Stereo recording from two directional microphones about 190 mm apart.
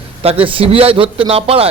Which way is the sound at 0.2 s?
30° right (ahead or behind).